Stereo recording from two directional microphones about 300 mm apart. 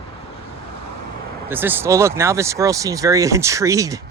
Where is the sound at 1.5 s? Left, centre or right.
Centre.